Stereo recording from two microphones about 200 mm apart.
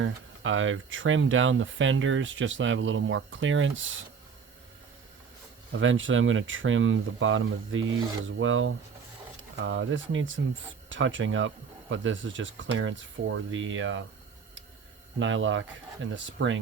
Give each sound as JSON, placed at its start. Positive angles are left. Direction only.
{"t": 0.0, "sound": "speech", "side_deg": -75}
{"t": 5.7, "sound": "speech", "side_deg": -75}
{"t": 15.2, "sound": "speech", "side_deg": -70}